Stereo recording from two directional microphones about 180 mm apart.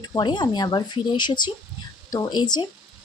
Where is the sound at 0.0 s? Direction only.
25° left (ahead or behind).